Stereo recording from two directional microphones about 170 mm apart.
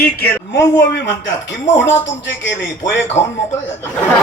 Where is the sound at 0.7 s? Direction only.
90° left.